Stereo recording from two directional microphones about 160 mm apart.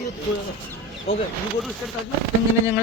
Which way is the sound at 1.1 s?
40° left (ahead or behind).